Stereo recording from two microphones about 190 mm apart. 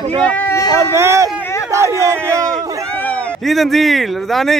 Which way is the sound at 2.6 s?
15° right (ahead or behind).